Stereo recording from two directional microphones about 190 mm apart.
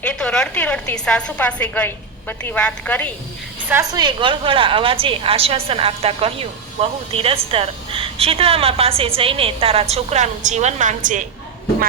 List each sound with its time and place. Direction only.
0.0 s a woman's voice: 5° left (ahead or behind)
3.7 s a woman's voice: 15° right (ahead or behind); by 11.3 s 40° right (ahead or behind)